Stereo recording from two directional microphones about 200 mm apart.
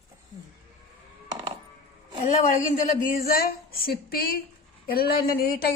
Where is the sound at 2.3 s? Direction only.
35° left (ahead or behind).